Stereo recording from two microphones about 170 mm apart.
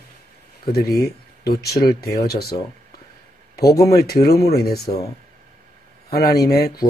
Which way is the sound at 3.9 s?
65° left (ahead or behind).